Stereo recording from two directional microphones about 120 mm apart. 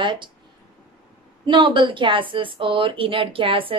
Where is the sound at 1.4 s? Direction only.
45° right (ahead or behind).